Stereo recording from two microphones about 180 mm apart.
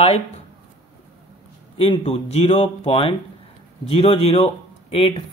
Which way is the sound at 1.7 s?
30° left (ahead or behind).